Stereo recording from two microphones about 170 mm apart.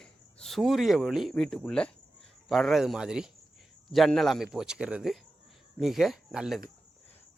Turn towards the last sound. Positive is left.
turn(degrees=0)  # may be behind; listen again after turning